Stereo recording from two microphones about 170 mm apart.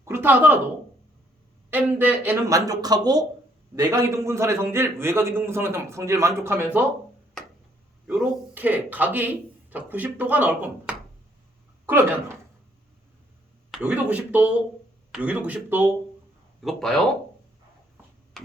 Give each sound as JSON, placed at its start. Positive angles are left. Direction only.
{"t": 0.0, "sound": "a sound", "side_deg": -10}
{"t": 1.7, "sound": "speech", "side_deg": -10}
{"t": 8.0, "sound": "speech", "side_deg": -10}
{"t": 13.7, "sound": "speech", "side_deg": -5}
{"t": 16.6, "sound": "speech", "side_deg": 5}
{"t": 18.4, "sound": "a sound", "side_deg": 0}